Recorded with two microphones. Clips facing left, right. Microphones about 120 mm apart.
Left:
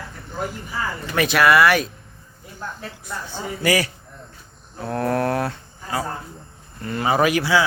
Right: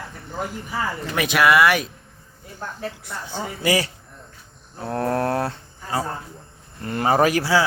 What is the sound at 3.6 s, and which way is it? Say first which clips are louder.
A man's voice: left 1 dB; 25° right (ahead or behind).